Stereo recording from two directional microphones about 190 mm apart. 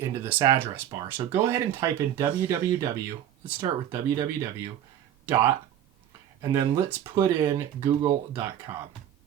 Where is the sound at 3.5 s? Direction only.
20° right (ahead or behind).